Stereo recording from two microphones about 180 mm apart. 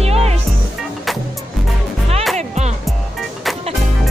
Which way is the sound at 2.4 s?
40° right (ahead or behind).